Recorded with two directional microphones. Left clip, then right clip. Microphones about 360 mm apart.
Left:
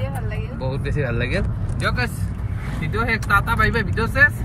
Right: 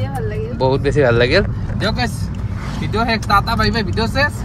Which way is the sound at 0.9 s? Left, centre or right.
Right.